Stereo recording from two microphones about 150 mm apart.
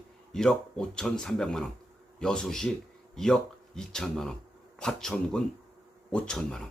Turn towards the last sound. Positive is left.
turn(degrees=5)  # may be behind; listen again after turning